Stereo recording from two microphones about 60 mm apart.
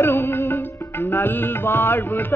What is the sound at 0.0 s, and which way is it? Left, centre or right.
Music, left.